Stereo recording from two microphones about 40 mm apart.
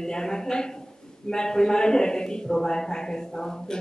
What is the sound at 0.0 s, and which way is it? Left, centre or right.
A man's voice, centre.